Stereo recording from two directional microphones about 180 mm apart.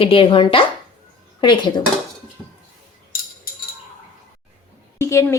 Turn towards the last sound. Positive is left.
turn(degrees=15)  # may be behind; listen again after turning